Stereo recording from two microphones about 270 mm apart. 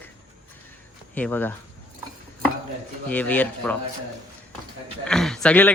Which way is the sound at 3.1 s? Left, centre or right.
Centre.